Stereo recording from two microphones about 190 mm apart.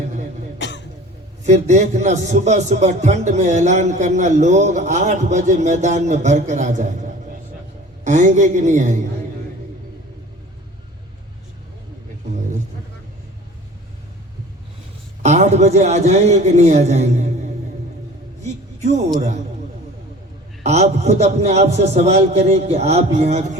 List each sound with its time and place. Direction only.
0.6 s cough: 65° left (ahead or behind)
1.5 s a man's voice: 40° right (ahead or behind)
8.0 s a man's voice: 40° right (ahead or behind)
15.2 s a man's voice: 35° right (ahead or behind)
18.4 s a sound: 35° right (ahead or behind)
20.7 s a man's voice: 35° right (ahead or behind)